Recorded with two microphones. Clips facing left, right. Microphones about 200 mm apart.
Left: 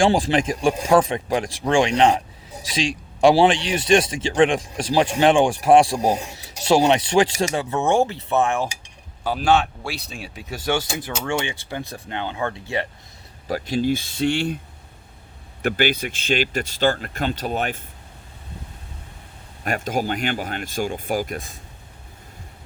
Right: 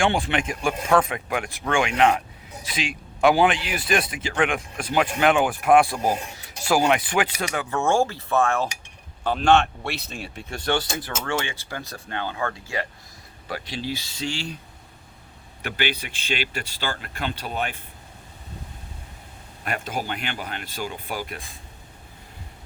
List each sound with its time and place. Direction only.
0.0 s speech: 35° left (ahead or behind)
13.5 s speech: 45° left (ahead or behind)
15.6 s speech: 45° left (ahead or behind)
19.6 s speech: 40° left (ahead or behind)